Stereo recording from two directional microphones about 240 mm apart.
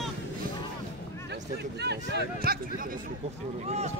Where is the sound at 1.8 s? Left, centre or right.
Right.